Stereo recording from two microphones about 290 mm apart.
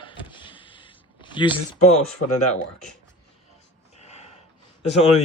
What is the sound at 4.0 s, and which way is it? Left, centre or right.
Gasp, left.